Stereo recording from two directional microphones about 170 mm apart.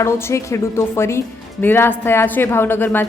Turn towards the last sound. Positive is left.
turn(degrees=10)  # may be behind; listen again after turning